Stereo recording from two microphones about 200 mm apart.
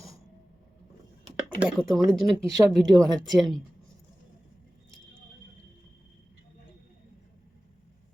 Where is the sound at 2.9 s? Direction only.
20° right (ahead or behind).